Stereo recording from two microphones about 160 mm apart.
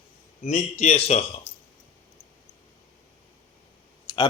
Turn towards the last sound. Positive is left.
turn(degrees=25)  # may be behind; listen again after turning